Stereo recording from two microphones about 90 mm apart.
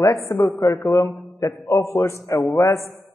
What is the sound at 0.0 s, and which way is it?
A man's voice, 35° left (ahead or behind).